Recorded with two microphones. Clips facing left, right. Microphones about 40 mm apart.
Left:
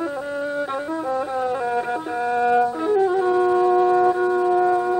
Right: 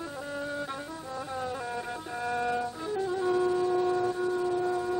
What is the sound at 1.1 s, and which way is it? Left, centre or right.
Music, left.